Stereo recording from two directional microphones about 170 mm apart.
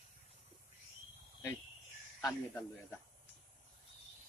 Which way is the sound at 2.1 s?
5° left (ahead or behind).